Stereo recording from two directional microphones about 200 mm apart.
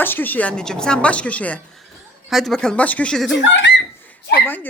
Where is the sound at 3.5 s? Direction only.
65° left (ahead or behind).